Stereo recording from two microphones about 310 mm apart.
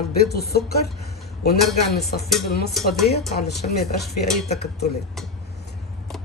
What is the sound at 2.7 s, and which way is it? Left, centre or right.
Speech, centre.